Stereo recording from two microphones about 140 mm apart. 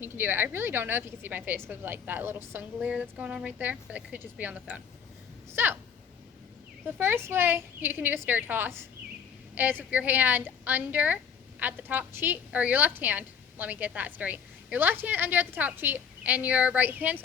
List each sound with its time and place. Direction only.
0.0 s a woman's voice: 15° right (ahead or behind)
6.8 s a woman's voice: 15° right (ahead or behind)